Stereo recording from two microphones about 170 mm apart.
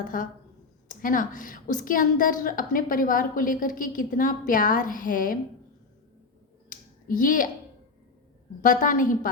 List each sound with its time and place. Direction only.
0.9 s a woman's voice: 50° left (ahead or behind)
6.7 s a sound: 55° left (ahead or behind)
8.6 s a woman's voice: 50° left (ahead or behind)